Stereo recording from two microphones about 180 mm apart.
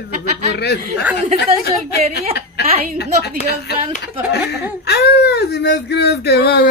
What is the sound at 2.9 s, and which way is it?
Speech, 65° left (ahead or behind).